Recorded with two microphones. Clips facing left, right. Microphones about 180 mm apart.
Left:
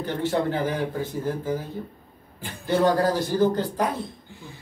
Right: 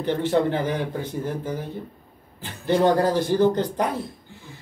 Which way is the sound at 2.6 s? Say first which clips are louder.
Right 2 dB; 20° right (ahead or behind).